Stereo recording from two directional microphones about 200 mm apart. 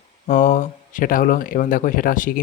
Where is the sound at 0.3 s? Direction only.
40° left (ahead or behind).